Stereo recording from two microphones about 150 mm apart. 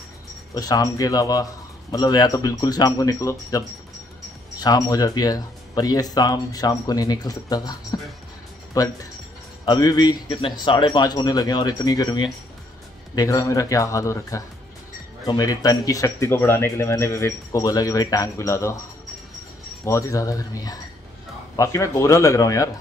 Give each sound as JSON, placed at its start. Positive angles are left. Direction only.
{"t": 0.6, "sound": "speech", "side_deg": 25}
{"t": 19.8, "sound": "speech", "side_deg": 20}